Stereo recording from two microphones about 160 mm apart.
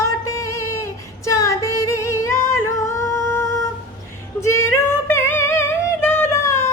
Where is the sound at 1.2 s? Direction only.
20° left (ahead or behind).